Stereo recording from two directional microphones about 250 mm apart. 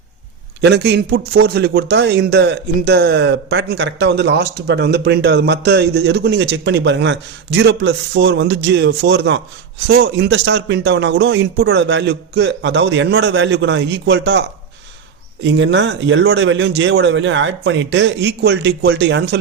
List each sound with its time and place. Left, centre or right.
0.6 s speech: right
15.4 s speech: right